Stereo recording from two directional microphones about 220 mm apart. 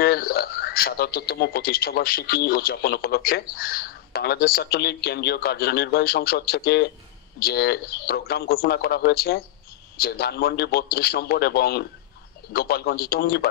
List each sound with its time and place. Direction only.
0.0 s speech: 45° left (ahead or behind)